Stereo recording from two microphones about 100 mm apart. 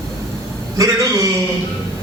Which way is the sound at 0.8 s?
35° right (ahead or behind).